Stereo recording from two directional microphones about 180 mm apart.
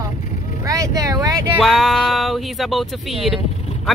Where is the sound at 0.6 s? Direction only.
20° right (ahead or behind).